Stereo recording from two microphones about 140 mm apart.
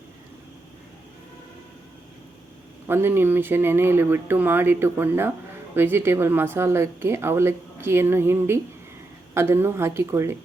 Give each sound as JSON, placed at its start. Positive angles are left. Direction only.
{"t": 2.8, "sound": "speech", "side_deg": -15}